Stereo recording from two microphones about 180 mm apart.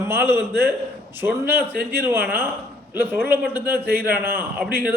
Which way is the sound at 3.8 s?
60° right (ahead or behind).